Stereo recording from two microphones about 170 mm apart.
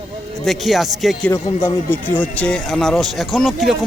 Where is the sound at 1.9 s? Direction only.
10° left (ahead or behind).